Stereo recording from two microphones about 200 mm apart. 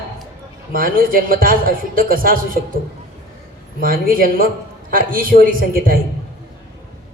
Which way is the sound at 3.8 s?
45° right (ahead or behind).